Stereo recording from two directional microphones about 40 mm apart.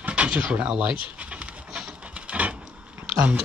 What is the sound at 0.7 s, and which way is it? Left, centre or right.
Dog, right.